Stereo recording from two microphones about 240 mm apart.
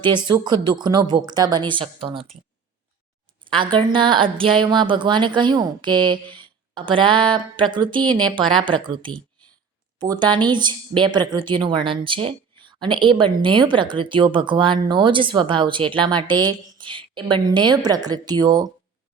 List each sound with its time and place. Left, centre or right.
0.0 s speech: centre
3.4 s speech: right